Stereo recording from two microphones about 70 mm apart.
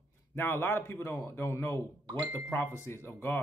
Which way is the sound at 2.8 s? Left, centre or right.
Left.